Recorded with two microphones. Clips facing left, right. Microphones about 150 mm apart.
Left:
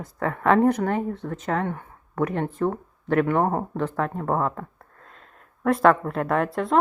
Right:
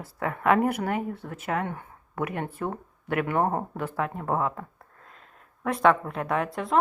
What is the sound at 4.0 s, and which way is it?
Speech, 40° left (ahead or behind).